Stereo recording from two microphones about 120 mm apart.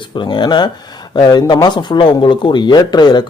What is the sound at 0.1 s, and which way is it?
Speech, 40° left (ahead or behind).